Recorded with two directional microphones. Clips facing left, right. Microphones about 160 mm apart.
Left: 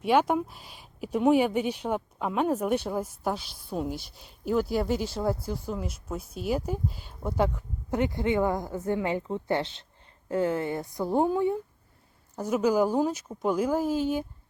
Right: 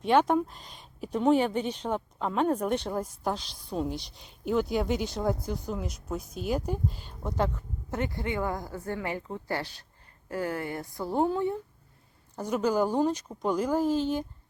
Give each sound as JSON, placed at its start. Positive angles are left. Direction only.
{"t": 0.0, "sound": "speech", "side_deg": 10}